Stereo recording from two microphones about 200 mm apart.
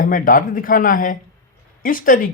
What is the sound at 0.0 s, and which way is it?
Speech, 45° left (ahead or behind).